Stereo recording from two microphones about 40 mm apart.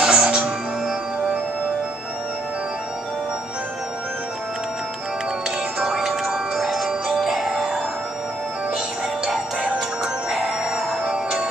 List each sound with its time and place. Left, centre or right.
0.0 s music: centre
5.8 s music: centre
10.3 s music: centre
11.1 s music: centre